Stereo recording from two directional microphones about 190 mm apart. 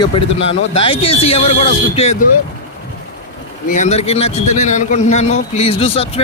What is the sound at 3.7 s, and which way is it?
A man's voice, 35° left (ahead or behind).